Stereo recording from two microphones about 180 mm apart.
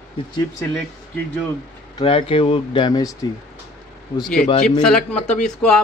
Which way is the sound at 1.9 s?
30° left (ahead or behind).